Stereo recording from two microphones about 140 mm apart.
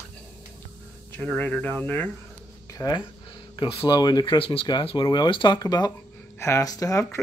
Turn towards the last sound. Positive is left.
turn(degrees=20)  # may be behind; listen again after turning